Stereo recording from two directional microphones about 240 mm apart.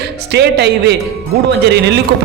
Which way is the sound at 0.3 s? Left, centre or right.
Right.